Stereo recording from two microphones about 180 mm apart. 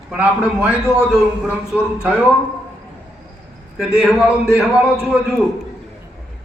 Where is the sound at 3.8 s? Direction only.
5° right (ahead or behind).